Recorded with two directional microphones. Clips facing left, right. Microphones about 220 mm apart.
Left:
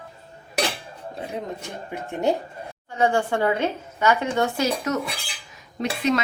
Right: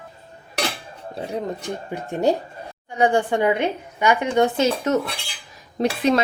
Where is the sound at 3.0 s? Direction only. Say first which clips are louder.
Right 3 dB; 15° right (ahead or behind).